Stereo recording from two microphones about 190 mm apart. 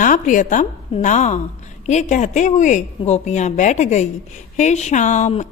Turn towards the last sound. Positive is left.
turn(degrees=40)  # may be behind; listen again after turning